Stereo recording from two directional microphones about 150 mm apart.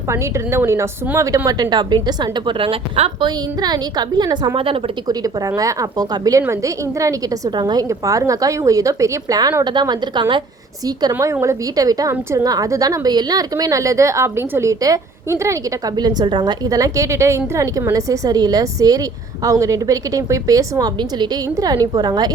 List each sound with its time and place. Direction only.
0.1 s a woman's voice: 20° right (ahead or behind); by 3.2 s 40° right (ahead or behind)
3.2 s a woman's voice: 25° right (ahead or behind)
5.2 s a woman's voice: 25° right (ahead or behind)
11.1 s a woman's voice: 20° right (ahead or behind)